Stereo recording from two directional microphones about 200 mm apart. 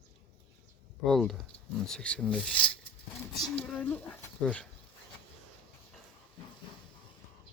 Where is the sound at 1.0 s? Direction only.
Centre (ahead or behind).